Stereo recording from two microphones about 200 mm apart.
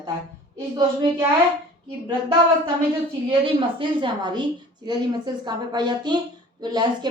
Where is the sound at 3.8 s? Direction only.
25° right (ahead or behind).